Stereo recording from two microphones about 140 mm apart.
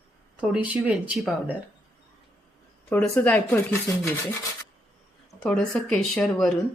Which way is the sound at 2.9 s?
10° left (ahead or behind).